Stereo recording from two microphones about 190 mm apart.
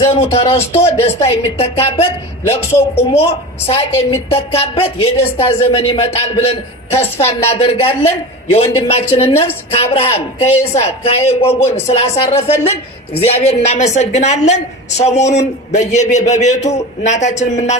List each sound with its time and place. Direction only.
0.0 s a woman's voice: 30° left (ahead or behind)
13.1 s a woman's voice: 30° left (ahead or behind)